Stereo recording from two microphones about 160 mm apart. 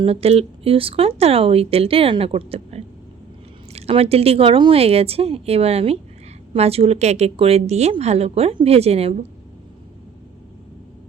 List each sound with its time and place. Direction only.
0.0 s speech: 40° right (ahead or behind)